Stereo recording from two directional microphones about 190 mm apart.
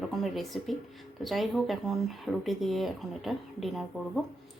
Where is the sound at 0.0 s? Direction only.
Centre (ahead or behind).